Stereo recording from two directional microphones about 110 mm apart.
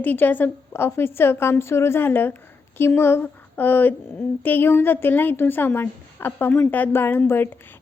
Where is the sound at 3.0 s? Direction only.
20° left (ahead or behind).